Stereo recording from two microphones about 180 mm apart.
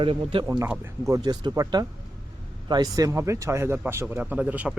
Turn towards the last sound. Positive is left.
turn(degrees=-5)  # may be behind; listen again after turning